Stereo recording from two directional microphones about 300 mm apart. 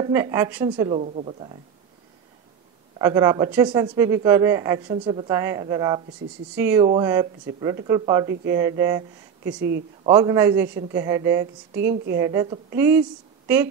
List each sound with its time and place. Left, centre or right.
0.0 s speech: centre
3.0 s speech: centre
9.6 s speech: right
10.0 s speech: centre